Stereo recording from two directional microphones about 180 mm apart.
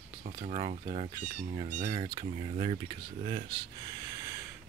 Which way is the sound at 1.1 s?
35° right (ahead or behind).